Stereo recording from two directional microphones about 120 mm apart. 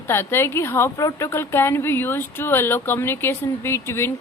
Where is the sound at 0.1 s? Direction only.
20° left (ahead or behind).